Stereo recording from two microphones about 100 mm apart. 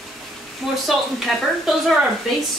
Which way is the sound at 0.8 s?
Centre (ahead or behind).